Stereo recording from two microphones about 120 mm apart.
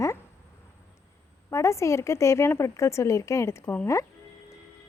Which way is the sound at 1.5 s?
25° left (ahead or behind).